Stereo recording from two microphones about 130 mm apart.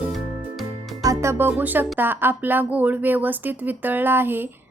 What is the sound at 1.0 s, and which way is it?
Music, 25° right (ahead or behind).